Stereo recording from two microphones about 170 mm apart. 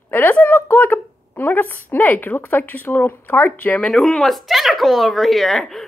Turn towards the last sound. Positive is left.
turn(degrees=0)  # may be behind; listen again after turning